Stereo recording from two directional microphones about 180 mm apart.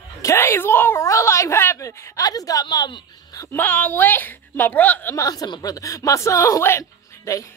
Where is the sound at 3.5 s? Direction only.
10° left (ahead or behind).